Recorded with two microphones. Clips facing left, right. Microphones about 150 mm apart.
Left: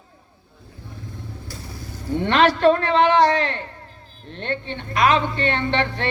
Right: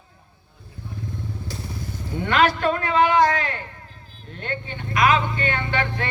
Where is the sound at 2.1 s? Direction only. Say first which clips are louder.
Left 2 dB; 30° left (ahead or behind).